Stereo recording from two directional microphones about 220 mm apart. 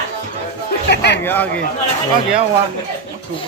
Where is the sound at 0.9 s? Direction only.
50° left (ahead or behind).